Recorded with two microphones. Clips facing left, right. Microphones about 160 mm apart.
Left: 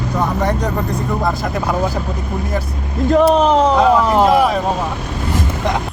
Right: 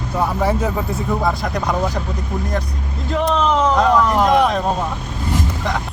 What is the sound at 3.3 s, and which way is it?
Speech, 40° left (ahead or behind).